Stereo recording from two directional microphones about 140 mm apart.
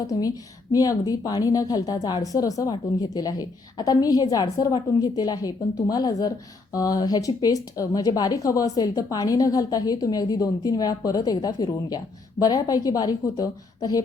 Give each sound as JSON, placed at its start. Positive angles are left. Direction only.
{"t": 0.7, "sound": "speech", "side_deg": 25}